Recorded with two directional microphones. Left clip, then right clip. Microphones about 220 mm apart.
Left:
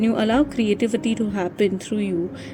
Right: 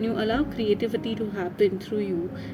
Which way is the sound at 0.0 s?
35° left (ahead or behind).